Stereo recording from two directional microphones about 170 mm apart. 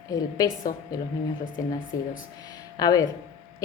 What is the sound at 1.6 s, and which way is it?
A woman's voice, 20° left (ahead or behind).